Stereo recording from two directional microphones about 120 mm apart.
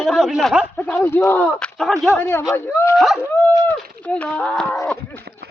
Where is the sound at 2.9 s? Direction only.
Centre (ahead or behind).